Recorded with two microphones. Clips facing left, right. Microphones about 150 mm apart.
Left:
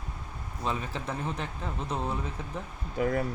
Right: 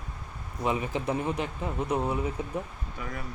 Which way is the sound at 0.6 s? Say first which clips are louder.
Right 4 dB; 15° right (ahead or behind).